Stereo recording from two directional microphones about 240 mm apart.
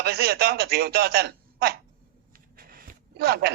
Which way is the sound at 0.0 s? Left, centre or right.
Right.